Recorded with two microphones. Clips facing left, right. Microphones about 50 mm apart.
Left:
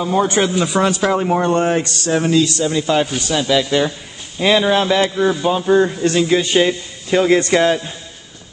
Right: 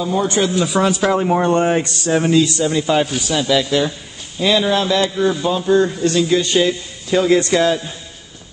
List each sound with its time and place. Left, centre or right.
0.0 s speech: left
0.7 s speech: centre
4.4 s speech: left
5.0 s speech: centre